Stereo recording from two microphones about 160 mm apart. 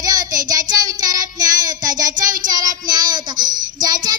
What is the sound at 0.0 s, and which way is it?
Child singing, 25° right (ahead or behind).